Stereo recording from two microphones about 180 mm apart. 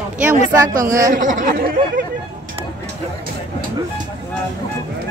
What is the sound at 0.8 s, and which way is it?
Speech, 15° right (ahead or behind).